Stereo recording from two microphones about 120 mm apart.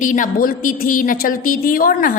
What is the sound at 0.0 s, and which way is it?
Speech, 90° left.